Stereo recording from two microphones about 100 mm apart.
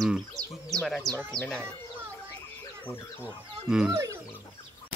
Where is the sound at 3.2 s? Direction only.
10° right (ahead or behind).